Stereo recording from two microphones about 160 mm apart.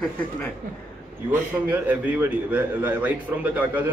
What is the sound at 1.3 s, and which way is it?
A man's voice, 10° right (ahead or behind).